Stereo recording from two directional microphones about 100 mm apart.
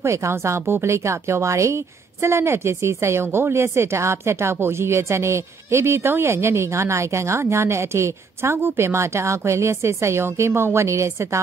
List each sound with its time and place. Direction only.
0.0 s a woman's voice: 30° right (ahead or behind)